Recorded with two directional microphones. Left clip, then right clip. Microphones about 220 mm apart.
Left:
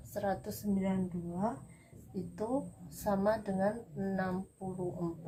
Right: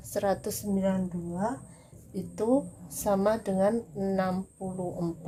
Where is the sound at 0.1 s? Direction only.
40° right (ahead or behind).